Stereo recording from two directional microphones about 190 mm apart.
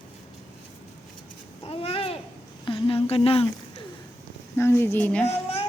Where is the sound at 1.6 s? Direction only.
30° left (ahead or behind).